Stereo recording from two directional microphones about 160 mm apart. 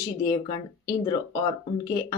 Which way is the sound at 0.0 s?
25° left (ahead or behind).